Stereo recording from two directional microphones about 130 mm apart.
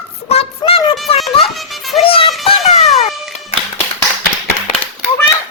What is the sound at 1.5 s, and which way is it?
Music, centre (ahead or behind).